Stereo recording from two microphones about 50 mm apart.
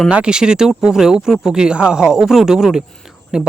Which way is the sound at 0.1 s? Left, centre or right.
Centre.